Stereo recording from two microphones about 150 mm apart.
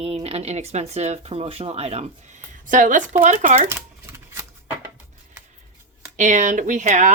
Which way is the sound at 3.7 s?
15° right (ahead or behind).